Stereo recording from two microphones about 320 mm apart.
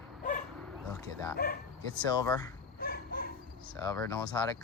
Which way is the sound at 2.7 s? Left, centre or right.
Left.